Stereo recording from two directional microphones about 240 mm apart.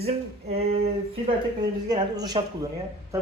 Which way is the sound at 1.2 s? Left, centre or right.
Centre.